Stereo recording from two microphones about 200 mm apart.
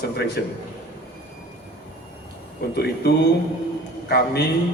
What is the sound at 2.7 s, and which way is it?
Speech, 55° left (ahead or behind).